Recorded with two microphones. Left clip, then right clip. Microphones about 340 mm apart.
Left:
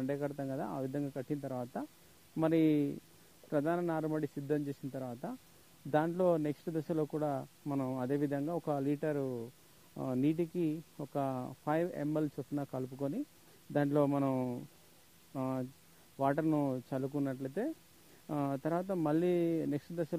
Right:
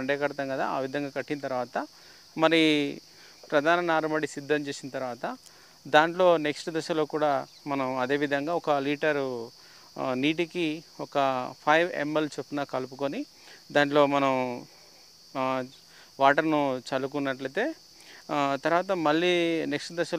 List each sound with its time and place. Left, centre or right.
0.0 s speech: centre